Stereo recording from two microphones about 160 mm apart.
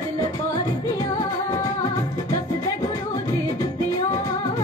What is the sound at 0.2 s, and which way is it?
Music, 25° left (ahead or behind).